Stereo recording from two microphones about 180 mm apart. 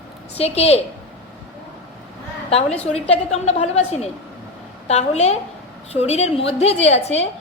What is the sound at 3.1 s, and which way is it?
A woman's voice, 35° left (ahead or behind).